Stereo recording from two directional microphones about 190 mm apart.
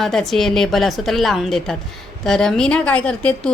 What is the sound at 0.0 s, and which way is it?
A woman's voice, centre (ahead or behind).